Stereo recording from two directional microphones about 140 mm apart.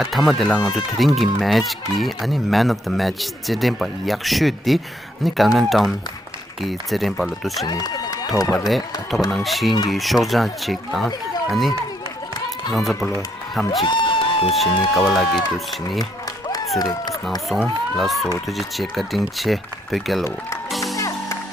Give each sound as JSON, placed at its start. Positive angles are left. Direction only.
{"t": 0.0, "sound": "speech", "side_deg": 0}
{"t": 7.6, "sound": "run", "side_deg": 25}
{"t": 8.6, "sound": "speech", "side_deg": 0}
{"t": 12.7, "sound": "speech", "side_deg": 0}
{"t": 13.8, "sound": "a sound", "side_deg": 35}
{"t": 14.5, "sound": "speech", "side_deg": 0}
{"t": 16.7, "sound": "speech", "side_deg": 30}
{"t": 17.5, "sound": "speech", "side_deg": 0}
{"t": 20.8, "sound": "music", "side_deg": 25}